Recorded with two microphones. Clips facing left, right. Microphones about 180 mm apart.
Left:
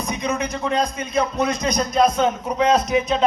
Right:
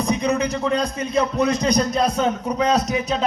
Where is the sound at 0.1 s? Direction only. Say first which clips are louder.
Right 3 dB; 35° right (ahead or behind).